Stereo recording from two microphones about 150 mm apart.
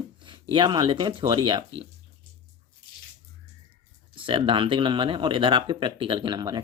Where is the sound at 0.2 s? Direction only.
35° right (ahead or behind).